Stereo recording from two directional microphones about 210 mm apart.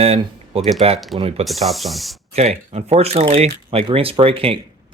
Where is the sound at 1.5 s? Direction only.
Centre (ahead or behind).